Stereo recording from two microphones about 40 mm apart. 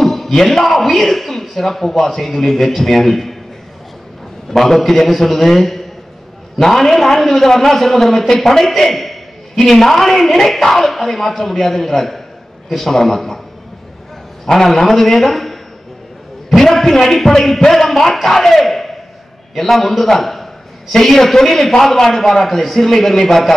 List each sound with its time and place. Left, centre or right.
0.0 s a man's voice: centre
4.5 s a man's voice: centre
14.4 s a man's voice: centre